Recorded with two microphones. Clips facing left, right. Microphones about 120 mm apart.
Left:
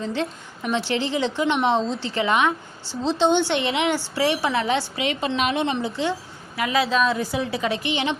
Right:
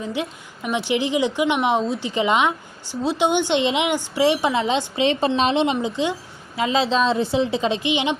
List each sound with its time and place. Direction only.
0.0 s a woman's voice: 10° right (ahead or behind)